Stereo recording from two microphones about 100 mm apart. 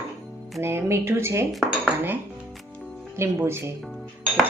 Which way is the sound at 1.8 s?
20° right (ahead or behind).